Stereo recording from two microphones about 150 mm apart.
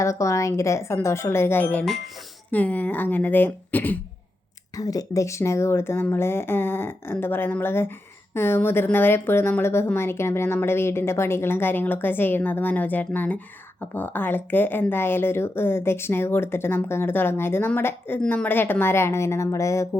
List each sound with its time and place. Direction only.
0.0 s a woman's voice: 20° left (ahead or behind)
4.8 s a woman's voice: 25° left (ahead or behind)